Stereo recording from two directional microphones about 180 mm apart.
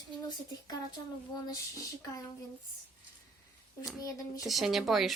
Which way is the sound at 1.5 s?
20° left (ahead or behind).